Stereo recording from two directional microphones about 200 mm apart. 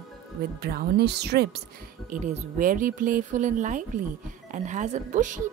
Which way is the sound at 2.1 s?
40° right (ahead or behind).